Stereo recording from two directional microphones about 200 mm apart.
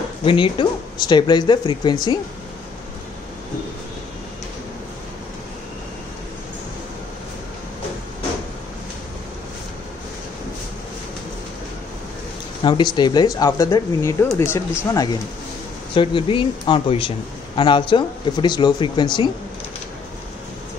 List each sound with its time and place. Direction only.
0.2 s speech: 25° left (ahead or behind)
12.6 s speech: 20° left (ahead or behind)